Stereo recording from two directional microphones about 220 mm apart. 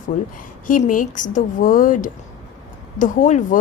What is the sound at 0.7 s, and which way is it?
A woman's voice, 35° left (ahead or behind).